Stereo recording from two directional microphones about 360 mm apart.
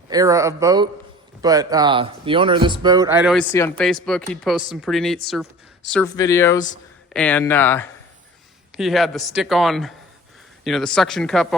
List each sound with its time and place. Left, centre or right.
0.1 s speech: centre